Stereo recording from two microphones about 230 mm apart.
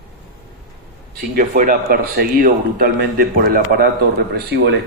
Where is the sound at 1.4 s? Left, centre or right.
Right.